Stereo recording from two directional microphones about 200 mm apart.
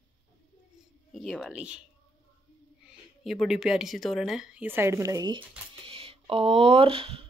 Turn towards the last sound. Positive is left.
turn(degrees=-25)  # may be behind; listen again after turning